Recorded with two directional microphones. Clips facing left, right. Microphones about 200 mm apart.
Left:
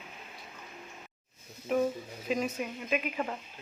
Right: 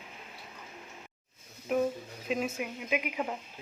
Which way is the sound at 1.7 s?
Centre (ahead or behind).